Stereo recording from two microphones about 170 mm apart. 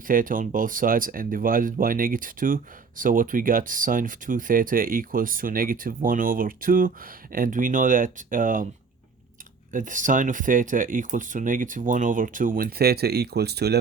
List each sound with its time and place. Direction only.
0.1 s speech: 55° right (ahead or behind)
9.7 s speech: 50° right (ahead or behind); by 13.7 s 75° right (ahead or behind)